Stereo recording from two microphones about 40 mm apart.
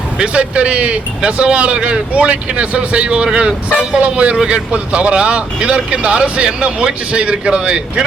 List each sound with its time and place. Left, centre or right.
0.2 s speech: right